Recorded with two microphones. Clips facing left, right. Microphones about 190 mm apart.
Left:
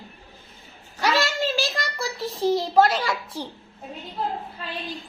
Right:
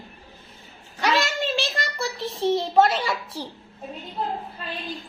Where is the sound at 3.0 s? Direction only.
10° right (ahead or behind).